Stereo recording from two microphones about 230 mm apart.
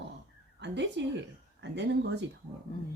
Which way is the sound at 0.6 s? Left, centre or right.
Right.